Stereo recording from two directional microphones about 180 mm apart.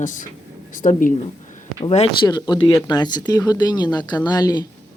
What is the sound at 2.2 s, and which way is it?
Speech, 25° left (ahead or behind).